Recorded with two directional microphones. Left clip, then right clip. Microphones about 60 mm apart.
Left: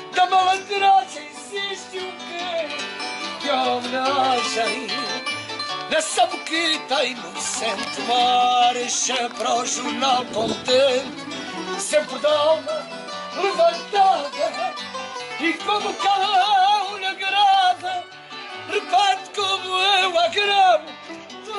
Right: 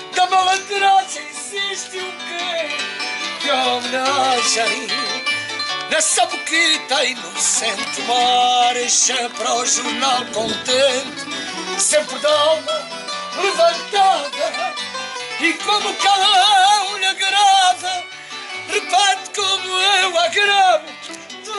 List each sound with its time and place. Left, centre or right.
0.1 s music: centre
13.4 s speech: centre
15.4 s music: centre
18.7 s music: centre